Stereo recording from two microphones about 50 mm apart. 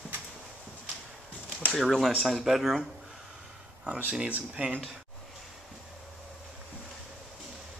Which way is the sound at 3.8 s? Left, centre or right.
Right.